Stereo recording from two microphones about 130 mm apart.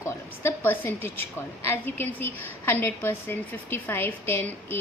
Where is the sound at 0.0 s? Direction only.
15° left (ahead or behind).